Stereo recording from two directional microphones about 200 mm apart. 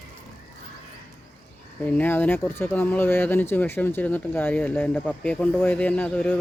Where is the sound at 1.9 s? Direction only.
10° left (ahead or behind).